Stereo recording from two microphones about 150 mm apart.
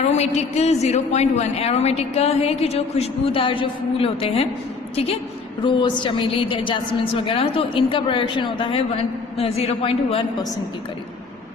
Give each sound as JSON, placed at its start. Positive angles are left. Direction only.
{"t": 0.0, "sound": "a man's voice", "side_deg": 45}
{"t": 5.6, "sound": "a woman's voice", "side_deg": 30}
{"t": 9.4, "sound": "a woman's voice", "side_deg": 40}